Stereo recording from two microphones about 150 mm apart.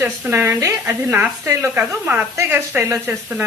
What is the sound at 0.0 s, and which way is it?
A woman's voice, 15° right (ahead or behind).